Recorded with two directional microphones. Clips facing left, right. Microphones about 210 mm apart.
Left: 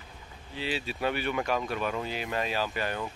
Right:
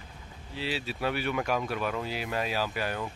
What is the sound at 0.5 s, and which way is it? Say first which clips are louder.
Speech: even; centre (ahead or behind).